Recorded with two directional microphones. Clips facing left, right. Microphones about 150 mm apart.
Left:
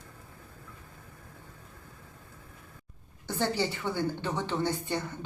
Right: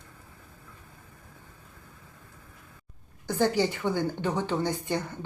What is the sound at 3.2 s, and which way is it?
A woman's voice, 15° right (ahead or behind).